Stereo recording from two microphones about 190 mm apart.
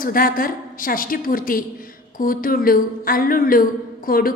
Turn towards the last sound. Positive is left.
turn(degrees=50)  # may be behind; listen again after turning